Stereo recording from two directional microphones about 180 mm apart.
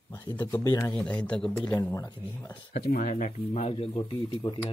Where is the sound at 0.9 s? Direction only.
5° left (ahead or behind).